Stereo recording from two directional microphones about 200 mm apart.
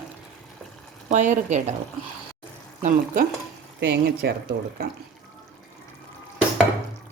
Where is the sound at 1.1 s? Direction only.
35° right (ahead or behind).